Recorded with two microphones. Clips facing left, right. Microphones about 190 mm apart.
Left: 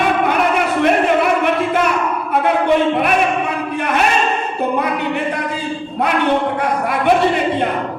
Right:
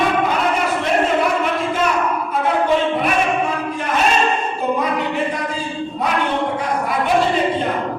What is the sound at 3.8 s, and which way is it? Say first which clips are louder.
Speech: left 5 dB; 60° left (ahead or behind).